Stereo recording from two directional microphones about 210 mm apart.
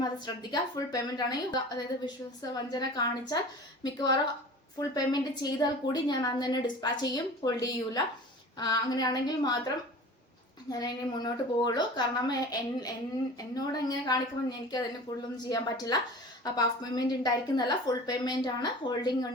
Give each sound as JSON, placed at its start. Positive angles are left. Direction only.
{"t": 0.5, "sound": "a woman's voice", "side_deg": 20}